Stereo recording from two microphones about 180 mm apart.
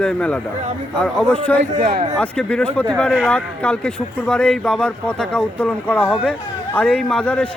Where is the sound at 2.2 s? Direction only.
5° left (ahead or behind).